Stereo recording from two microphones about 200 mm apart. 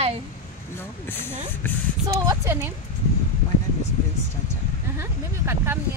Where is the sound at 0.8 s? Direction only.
10° left (ahead or behind).